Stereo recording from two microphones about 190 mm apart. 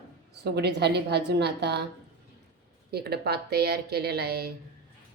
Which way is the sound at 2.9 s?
55° right (ahead or behind).